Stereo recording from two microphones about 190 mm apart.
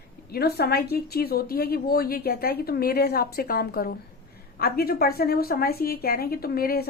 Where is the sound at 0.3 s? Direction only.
55° left (ahead or behind).